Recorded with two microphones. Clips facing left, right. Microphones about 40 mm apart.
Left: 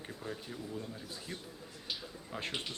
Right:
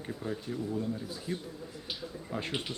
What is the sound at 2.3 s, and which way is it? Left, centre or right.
Speech, centre.